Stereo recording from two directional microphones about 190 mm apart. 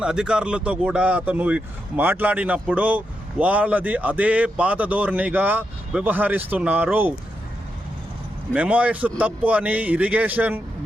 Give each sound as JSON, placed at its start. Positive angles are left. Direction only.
{"t": 0.0, "sound": "speech", "side_deg": -5}
{"t": 8.5, "sound": "speech", "side_deg": -5}